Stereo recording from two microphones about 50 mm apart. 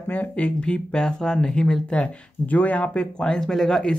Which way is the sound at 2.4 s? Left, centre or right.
Left.